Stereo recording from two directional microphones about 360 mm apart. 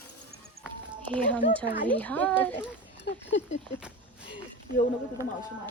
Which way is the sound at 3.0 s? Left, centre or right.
Left.